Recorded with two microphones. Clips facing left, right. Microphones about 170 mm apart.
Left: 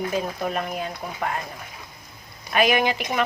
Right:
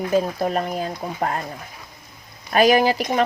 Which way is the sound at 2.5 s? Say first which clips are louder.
Right 5 dB; 35° right (ahead or behind).